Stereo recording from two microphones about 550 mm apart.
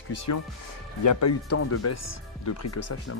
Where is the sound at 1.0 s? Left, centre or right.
Left.